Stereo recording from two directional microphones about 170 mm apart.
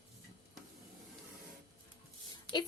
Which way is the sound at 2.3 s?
25° left (ahead or behind).